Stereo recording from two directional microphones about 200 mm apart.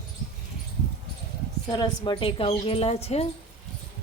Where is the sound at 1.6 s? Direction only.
20° left (ahead or behind).